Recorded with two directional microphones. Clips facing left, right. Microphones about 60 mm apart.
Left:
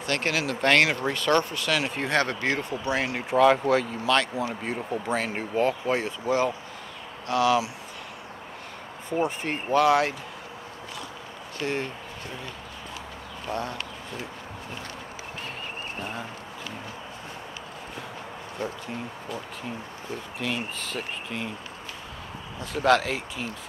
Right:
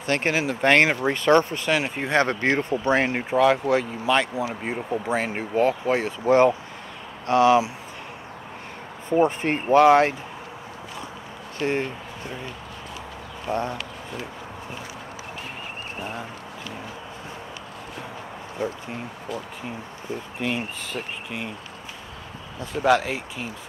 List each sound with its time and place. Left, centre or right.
0.0 s speech: right
3.3 s speech: centre
3.7 s speech: centre
6.0 s speech: right
9.2 s speech: right
11.6 s speech: right
13.5 s speech: right
16.0 s speech: centre
18.6 s speech: right
20.3 s speech: centre
20.9 s speech: centre
22.7 s speech: centre